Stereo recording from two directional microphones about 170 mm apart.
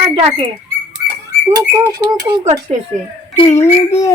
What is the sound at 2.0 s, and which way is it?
Speech, 25° right (ahead or behind).